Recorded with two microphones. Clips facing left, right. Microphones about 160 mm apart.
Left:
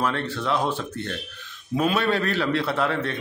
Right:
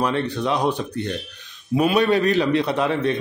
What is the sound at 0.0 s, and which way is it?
A man's voice, 15° right (ahead or behind).